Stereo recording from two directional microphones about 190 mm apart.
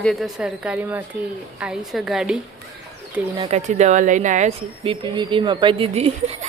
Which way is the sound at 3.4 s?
35° right (ahead or behind).